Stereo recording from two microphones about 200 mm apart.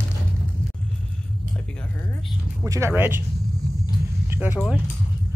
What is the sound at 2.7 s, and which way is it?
Speech, 15° right (ahead or behind).